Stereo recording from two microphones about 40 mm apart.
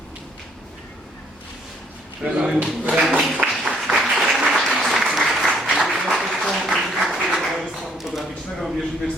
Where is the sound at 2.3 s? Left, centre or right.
Right.